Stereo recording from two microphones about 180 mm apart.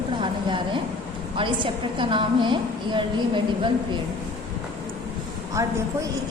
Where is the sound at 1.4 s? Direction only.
30° right (ahead or behind).